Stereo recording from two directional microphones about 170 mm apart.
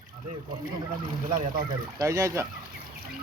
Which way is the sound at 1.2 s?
60° right (ahead or behind).